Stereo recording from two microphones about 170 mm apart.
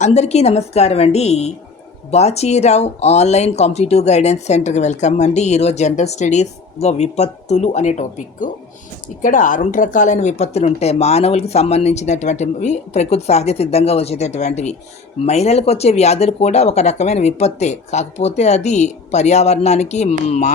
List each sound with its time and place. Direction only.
0.0 s speech: 40° left (ahead or behind)